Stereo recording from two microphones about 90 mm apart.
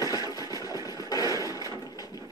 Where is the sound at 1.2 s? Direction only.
35° right (ahead or behind).